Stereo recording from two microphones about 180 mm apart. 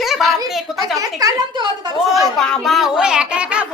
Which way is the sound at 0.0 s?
Centre (ahead or behind).